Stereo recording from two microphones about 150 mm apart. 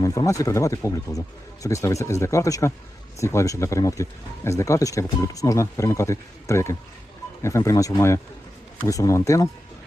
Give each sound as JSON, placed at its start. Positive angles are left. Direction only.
{"t": 0.0, "sound": "speech", "side_deg": 20}